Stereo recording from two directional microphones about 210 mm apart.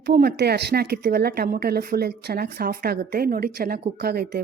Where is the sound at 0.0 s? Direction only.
50° right (ahead or behind).